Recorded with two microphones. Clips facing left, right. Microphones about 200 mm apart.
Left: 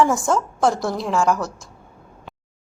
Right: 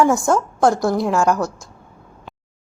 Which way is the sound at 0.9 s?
65° right (ahead or behind).